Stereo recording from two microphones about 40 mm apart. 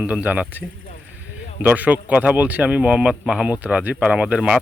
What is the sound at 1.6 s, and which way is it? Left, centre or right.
Speech, right.